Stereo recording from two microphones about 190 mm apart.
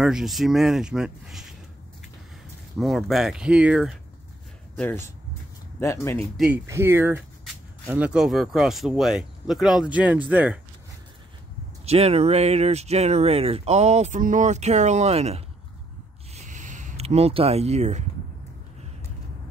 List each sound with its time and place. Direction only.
0.0 s speech: 5° right (ahead or behind)
2.8 s speech: centre (ahead or behind)
4.7 s speech: 10° left (ahead or behind)
6.3 s speech: 5° right (ahead or behind)
11.8 s speech: 35° right (ahead or behind)
16.3 s a sound: 40° right (ahead or behind)